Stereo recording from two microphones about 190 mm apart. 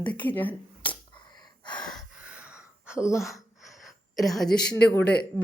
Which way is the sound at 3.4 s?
Centre (ahead or behind).